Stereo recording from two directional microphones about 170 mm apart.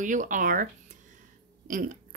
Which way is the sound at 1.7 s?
55° right (ahead or behind).